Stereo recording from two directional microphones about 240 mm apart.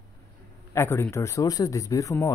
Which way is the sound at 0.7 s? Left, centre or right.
Centre.